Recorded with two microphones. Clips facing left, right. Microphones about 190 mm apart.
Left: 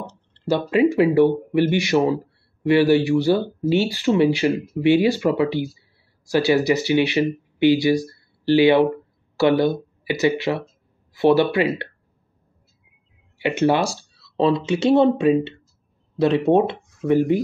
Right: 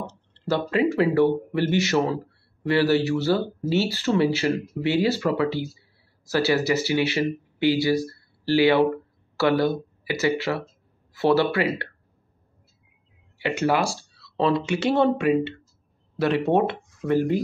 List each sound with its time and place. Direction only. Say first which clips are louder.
0.5 s speech: left 4 dB; 15° left (ahead or behind)
13.4 s speech: left 4 dB; 20° left (ahead or behind)